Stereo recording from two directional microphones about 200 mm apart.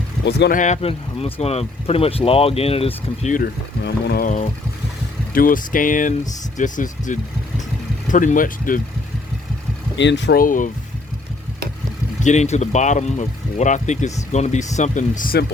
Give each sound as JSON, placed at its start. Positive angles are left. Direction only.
{"t": 0.3, "sound": "speech", "side_deg": 55}
{"t": 0.5, "sound": "speech", "side_deg": 35}
{"t": 3.8, "sound": "speech", "side_deg": 55}
{"t": 5.3, "sound": "speech", "side_deg": 45}
{"t": 10.0, "sound": "speech", "side_deg": 65}
{"t": 12.2, "sound": "speech", "side_deg": 35}